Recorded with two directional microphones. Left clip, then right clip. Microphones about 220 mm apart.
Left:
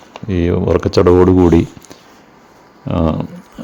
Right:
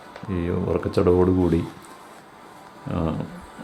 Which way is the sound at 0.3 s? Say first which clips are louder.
Left 11 dB; 35° left (ahead or behind).